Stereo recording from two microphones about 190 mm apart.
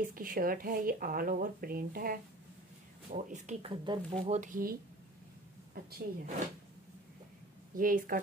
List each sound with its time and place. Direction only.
0.0 s speech: 45° right (ahead or behind)
3.7 s speech: 25° right (ahead or behind)
4.3 s speech: 40° right (ahead or behind)
5.9 s speech: 55° right (ahead or behind)
7.7 s speech: 45° right (ahead or behind)